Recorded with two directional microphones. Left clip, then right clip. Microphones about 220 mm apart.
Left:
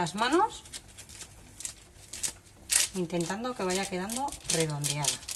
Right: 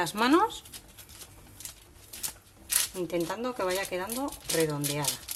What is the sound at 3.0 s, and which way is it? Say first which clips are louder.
Speech: right 2 dB; 35° right (ahead or behind).